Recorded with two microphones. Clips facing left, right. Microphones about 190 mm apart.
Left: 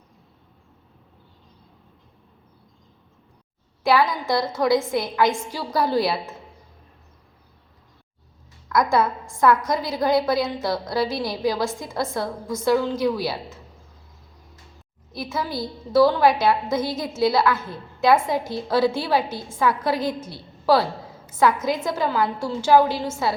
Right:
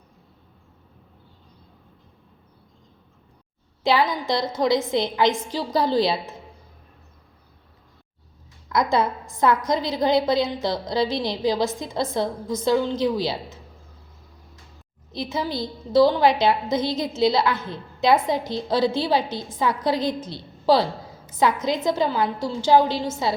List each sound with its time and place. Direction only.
3.8 s a woman's voice: 20° right (ahead or behind)
8.7 s a woman's voice: 20° right (ahead or behind)
15.1 s a woman's voice: 20° right (ahead or behind)